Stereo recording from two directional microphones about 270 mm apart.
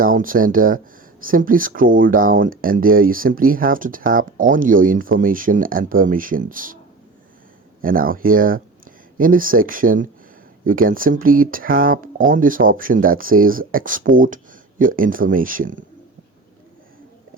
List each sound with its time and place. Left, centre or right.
0.0 s speech: right
7.8 s speech: right